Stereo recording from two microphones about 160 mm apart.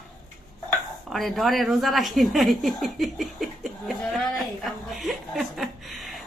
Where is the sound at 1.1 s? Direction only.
Centre (ahead or behind).